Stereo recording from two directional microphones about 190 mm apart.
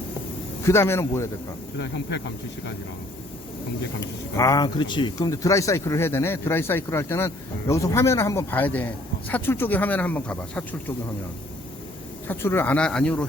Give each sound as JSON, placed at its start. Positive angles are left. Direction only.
{"t": 0.6, "sound": "speech", "side_deg": 15}
{"t": 1.8, "sound": "speech", "side_deg": 65}
{"t": 4.4, "sound": "speech", "side_deg": 20}
{"t": 12.3, "sound": "speech", "side_deg": 10}